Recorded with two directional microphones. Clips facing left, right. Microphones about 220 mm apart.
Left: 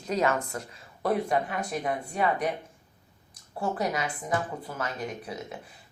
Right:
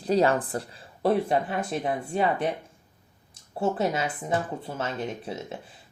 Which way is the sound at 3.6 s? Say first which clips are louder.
Right 4 dB; 25° right (ahead or behind).